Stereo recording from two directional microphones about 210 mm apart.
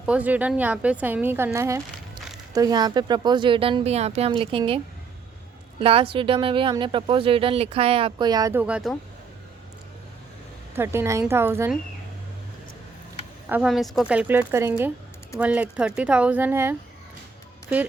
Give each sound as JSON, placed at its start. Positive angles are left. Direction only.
{"t": 0.0, "sound": "a woman's voice", "side_deg": -5}
{"t": 5.8, "sound": "speech", "side_deg": -25}
{"t": 10.8, "sound": "a woman's voice", "side_deg": -10}
{"t": 13.5, "sound": "a woman's voice", "side_deg": 0}